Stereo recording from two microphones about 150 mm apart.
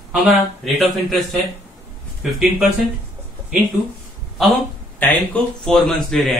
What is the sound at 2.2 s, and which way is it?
Speech, centre (ahead or behind).